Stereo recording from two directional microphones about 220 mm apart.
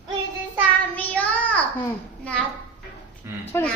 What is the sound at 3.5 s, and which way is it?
Speech, 10° left (ahead or behind).